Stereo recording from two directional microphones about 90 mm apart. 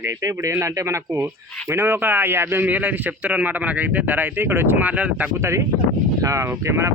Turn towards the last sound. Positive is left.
turn(degrees=-30)  # may be behind; listen again after turning